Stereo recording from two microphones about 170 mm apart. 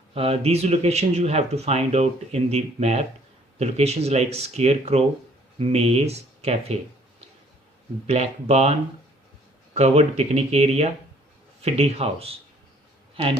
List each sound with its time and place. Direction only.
0.1 s speech: 35° right (ahead or behind)
8.0 s speech: 40° right (ahead or behind)
9.7 s speech: 40° right (ahead or behind)